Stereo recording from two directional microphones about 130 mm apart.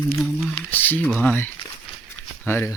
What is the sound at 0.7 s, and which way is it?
Speech, 15° left (ahead or behind).